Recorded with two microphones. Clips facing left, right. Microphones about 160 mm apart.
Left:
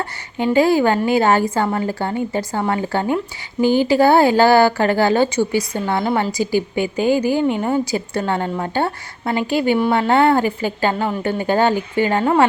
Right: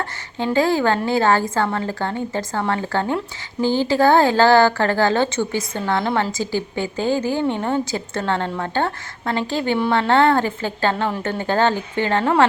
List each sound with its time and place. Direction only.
0.0 s speech: 15° left (ahead or behind)